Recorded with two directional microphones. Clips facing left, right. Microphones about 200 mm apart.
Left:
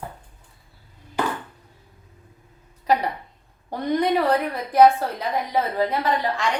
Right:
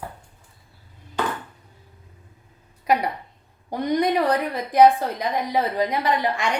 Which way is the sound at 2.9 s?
10° right (ahead or behind).